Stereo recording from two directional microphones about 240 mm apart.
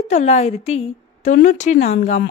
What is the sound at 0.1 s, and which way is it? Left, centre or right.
Speech, left.